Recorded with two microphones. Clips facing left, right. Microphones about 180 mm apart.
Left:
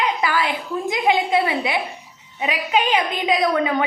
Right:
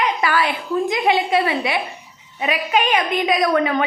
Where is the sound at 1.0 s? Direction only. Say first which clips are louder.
Left 1 dB; 15° left (ahead or behind).